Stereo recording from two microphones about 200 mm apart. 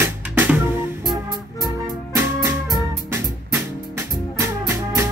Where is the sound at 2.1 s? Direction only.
15° right (ahead or behind).